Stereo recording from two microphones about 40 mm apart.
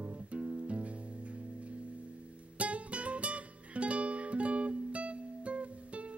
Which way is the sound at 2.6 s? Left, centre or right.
Right.